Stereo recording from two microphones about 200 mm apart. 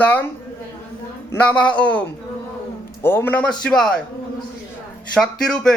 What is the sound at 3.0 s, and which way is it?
Speech, 10° left (ahead or behind).